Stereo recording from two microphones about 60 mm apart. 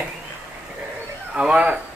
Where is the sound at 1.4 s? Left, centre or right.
Centre.